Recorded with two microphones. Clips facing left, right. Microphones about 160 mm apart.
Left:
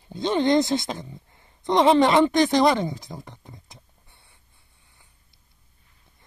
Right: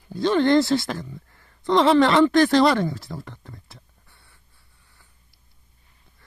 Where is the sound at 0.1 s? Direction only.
20° left (ahead or behind).